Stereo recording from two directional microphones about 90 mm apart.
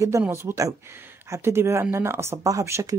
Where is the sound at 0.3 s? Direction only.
30° right (ahead or behind).